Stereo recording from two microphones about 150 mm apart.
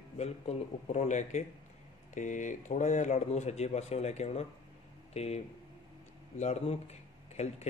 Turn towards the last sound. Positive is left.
turn(degrees=45)  # may be behind; listen again after turning